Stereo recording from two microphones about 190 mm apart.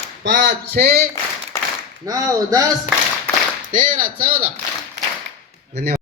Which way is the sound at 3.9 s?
50° right (ahead or behind).